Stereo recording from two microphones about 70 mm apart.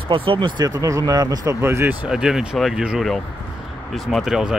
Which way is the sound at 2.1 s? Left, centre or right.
Centre.